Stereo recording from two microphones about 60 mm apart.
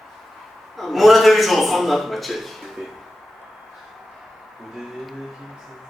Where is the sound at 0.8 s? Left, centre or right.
Centre.